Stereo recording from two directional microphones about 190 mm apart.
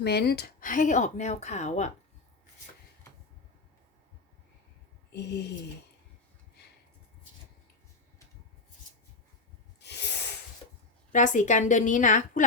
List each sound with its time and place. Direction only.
0.0 s speech: 55° left (ahead or behind); by 1.9 s 35° left (ahead or behind)
5.1 s speech: 65° left (ahead or behind)
9.8 s snort: 65° left (ahead or behind)
11.1 s speech: 40° left (ahead or behind)